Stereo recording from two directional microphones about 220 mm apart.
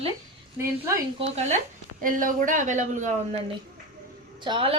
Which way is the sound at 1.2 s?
30° right (ahead or behind).